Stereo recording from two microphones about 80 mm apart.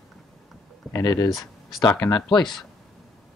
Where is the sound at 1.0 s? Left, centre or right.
Left.